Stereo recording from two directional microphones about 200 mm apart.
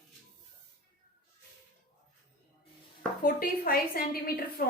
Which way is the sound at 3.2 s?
50° left (ahead or behind).